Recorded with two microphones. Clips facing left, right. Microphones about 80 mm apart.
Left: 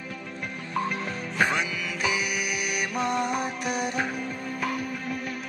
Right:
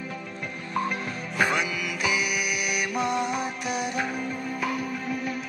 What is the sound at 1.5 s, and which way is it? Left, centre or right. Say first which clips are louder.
Music: right 1 dB; left.